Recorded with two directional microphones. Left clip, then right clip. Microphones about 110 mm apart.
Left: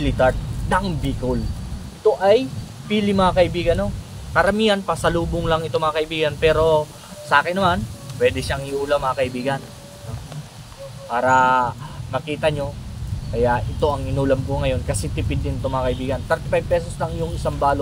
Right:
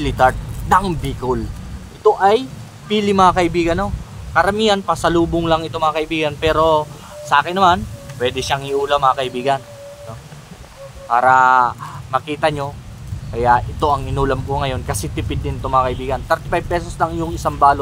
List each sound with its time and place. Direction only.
0.0 s speech: 35° right (ahead or behind)
2.9 s speech: 45° right (ahead or behind)
11.1 s speech: 35° right (ahead or behind)